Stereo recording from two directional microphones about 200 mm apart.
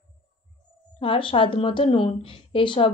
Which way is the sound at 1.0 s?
25° left (ahead or behind).